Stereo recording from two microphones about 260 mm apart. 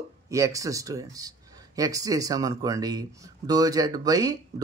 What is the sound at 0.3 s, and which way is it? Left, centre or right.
Speech, centre.